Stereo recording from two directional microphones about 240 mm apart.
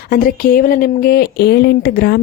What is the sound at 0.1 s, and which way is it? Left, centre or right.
A woman's voice, left.